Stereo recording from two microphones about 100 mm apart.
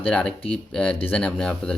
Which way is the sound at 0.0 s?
10° left (ahead or behind).